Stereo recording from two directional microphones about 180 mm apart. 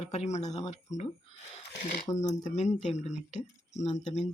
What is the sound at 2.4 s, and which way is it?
Speech, 40° left (ahead or behind).